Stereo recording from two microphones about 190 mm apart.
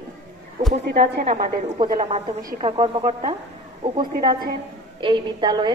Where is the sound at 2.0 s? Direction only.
35° right (ahead or behind).